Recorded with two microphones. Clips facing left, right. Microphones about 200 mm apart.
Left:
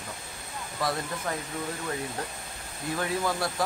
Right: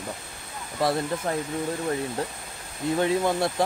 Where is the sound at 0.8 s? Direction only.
25° right (ahead or behind).